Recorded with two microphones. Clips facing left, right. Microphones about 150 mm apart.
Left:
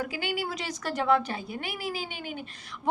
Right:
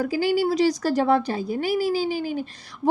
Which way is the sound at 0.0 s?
35° right (ahead or behind).